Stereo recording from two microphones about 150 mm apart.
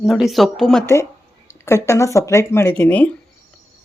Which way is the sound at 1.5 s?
20° left (ahead or behind).